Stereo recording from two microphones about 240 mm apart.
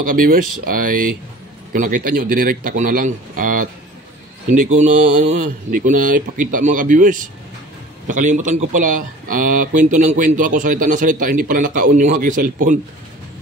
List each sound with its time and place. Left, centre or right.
0.1 s speech: right
1.7 s speech: right
4.7 s speech: right